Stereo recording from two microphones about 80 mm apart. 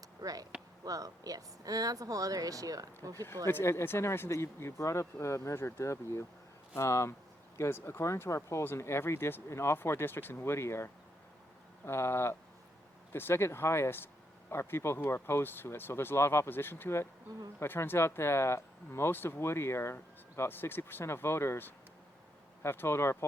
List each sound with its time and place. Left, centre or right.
0.2 s speech: right
3.4 s speech: left